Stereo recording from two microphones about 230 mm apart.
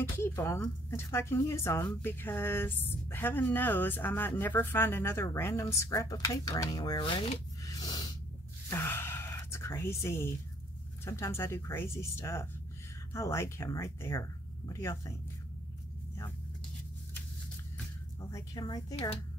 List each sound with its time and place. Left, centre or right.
0.2 s speech: centre
8.6 s gasp: centre
11.1 s speech: centre
18.2 s speech: centre